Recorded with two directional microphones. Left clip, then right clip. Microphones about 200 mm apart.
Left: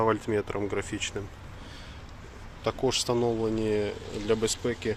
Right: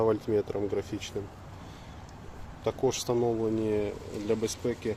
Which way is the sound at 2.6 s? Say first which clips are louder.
Left 1 dB; 5° right (ahead or behind).